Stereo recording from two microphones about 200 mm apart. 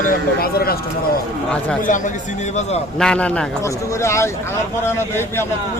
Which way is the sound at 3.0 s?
5° left (ahead or behind).